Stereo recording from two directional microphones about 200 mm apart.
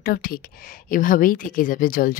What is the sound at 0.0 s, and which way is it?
A woman's voice, 45° left (ahead or behind).